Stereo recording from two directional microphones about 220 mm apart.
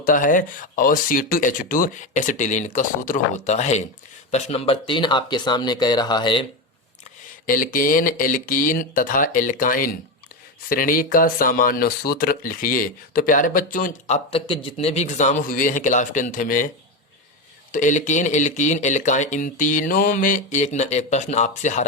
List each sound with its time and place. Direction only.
0.0 s speech: 35° left (ahead or behind); by 6.4 s 20° left (ahead or behind)
7.4 s speech: 40° left (ahead or behind)
14.3 s speech: 25° left (ahead or behind)
17.7 s speech: 35° left (ahead or behind)